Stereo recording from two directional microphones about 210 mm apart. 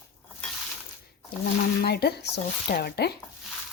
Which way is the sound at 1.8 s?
50° left (ahead or behind).